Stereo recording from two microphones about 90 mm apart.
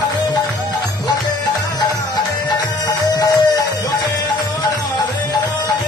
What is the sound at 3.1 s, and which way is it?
Music, 45° left (ahead or behind).